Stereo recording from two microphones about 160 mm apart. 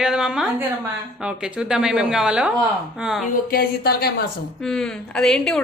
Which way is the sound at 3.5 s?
70° left (ahead or behind).